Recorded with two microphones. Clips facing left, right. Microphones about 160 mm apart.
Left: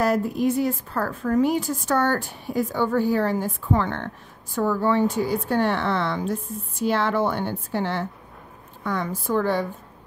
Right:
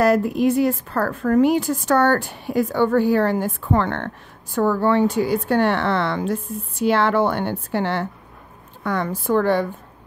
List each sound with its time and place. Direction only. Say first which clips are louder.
0.0 s a woman's voice: right 4 dB; 80° right